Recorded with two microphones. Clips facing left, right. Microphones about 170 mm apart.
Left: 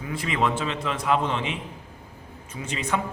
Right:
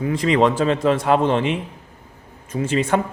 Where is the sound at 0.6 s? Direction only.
45° right (ahead or behind).